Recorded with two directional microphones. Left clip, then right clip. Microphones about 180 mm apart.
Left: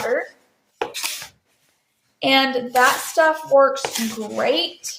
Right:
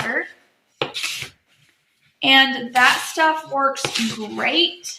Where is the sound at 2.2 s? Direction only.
55° left (ahead or behind).